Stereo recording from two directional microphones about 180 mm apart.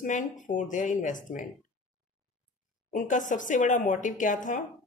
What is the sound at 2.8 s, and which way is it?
Speech, 45° left (ahead or behind).